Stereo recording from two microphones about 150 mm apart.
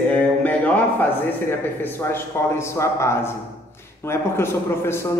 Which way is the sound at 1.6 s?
15° left (ahead or behind).